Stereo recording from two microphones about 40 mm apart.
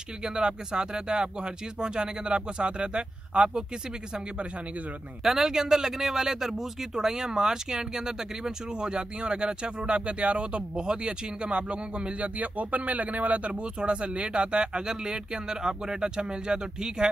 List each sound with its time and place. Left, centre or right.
0.2 s speech: centre
5.2 s speech: centre; by 12.3 s right
12.4 s speech: right